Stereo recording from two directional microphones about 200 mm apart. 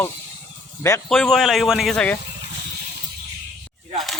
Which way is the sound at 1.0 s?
5° left (ahead or behind).